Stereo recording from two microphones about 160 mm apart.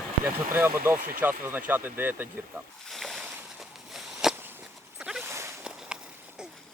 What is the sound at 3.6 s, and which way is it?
Walk, 5° right (ahead or behind).